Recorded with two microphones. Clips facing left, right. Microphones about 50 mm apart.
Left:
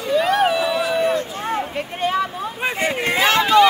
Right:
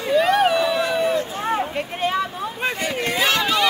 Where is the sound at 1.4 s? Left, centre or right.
Centre.